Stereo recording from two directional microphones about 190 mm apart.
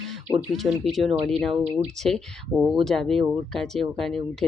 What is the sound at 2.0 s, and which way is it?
Speech, 5° left (ahead or behind).